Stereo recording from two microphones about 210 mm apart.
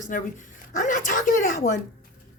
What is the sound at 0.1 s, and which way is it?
A woman's voice, 40° left (ahead or behind).